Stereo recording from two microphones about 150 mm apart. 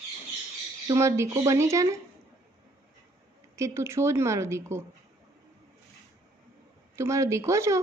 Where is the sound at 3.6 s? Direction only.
20° right (ahead or behind).